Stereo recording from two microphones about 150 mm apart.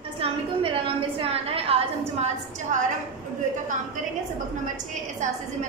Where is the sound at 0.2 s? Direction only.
35° right (ahead or behind).